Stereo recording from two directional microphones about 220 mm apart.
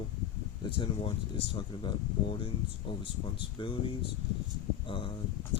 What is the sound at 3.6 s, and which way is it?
Speech, 25° left (ahead or behind).